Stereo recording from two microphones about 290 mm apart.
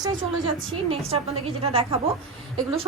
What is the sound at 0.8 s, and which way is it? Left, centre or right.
A woman's voice, centre.